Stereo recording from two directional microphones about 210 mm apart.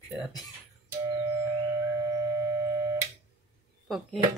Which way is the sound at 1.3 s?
15° right (ahead or behind).